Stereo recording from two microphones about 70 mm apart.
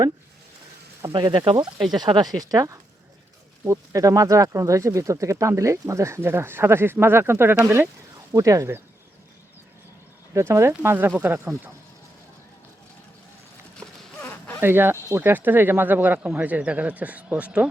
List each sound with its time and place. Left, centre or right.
1.1 s speech: right
8.3 s speech: right
10.3 s speech: right
13.7 s a sound: left
14.6 s speech: right; by 17.7 s centre